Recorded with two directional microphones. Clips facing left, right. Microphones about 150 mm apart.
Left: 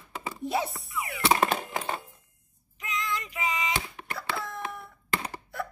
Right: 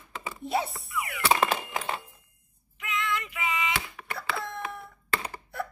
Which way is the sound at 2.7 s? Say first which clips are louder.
Right 2 dB; 35° left (ahead or behind).